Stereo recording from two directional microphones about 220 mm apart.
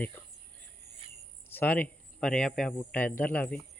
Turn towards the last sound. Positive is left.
turn(degrees=10)  # may be behind; listen again after turning